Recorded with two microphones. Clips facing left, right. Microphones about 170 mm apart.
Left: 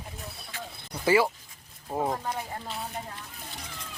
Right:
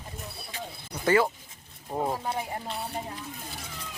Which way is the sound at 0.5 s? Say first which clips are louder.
Right 2 dB; 20° right (ahead or behind).